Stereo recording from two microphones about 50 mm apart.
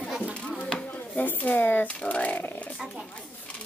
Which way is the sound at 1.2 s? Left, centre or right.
Left.